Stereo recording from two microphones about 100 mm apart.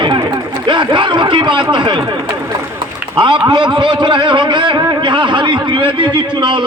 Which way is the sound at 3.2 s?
50° right (ahead or behind).